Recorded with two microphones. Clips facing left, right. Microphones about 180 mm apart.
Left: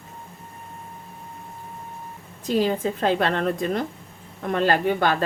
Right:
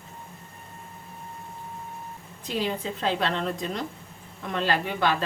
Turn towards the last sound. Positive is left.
turn(degrees=45)  # may be behind; listen again after turning